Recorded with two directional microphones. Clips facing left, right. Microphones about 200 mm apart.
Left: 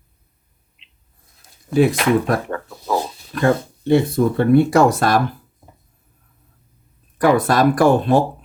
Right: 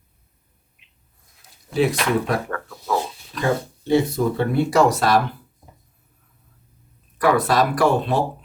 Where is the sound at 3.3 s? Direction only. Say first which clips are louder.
Left 5 dB; 55° left (ahead or behind).